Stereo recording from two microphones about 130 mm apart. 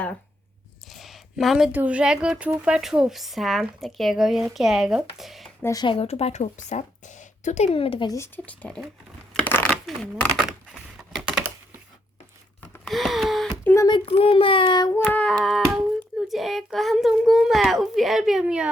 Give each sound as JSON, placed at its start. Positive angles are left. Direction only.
{"t": 0.9, "sound": "speech", "side_deg": 0}
{"t": 5.8, "sound": "a woman's voice", "side_deg": 45}
{"t": 8.0, "sound": "speech", "side_deg": 25}
{"t": 8.4, "sound": "speech", "side_deg": 10}
{"t": 9.3, "sound": "a sound", "side_deg": 15}
{"t": 9.8, "sound": "typing", "side_deg": 0}
{"t": 12.8, "sound": "a sound", "side_deg": 0}
{"t": 13.7, "sound": "child singing", "side_deg": 30}
{"t": 14.0, "sound": "a child's voice", "side_deg": 45}
{"t": 15.0, "sound": "female singing", "side_deg": 10}
{"t": 16.3, "sound": "speech", "side_deg": 0}